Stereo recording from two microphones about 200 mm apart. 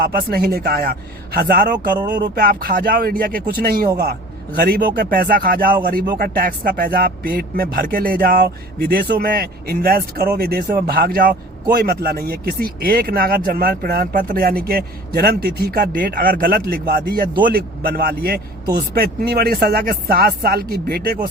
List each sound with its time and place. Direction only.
0.0 s speech: 50° right (ahead or behind)